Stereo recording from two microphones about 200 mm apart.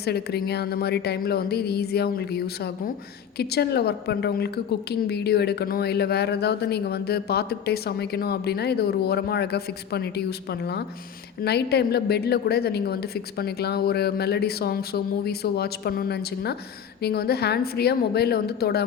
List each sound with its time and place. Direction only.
0.0 s a woman's voice: 55° left (ahead or behind)